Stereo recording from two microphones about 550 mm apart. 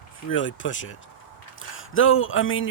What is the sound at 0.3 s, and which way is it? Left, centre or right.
Speech, left.